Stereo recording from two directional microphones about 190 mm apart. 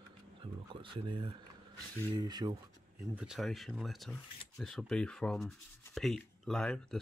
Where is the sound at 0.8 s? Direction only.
25° right (ahead or behind).